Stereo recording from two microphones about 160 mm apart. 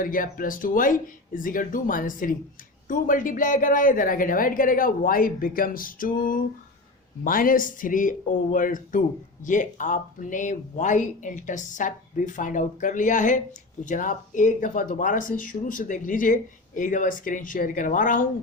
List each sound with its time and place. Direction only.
0.0 s speech: 60° left (ahead or behind)